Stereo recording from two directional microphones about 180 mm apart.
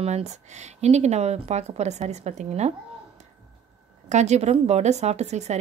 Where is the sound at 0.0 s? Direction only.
40° right (ahead or behind).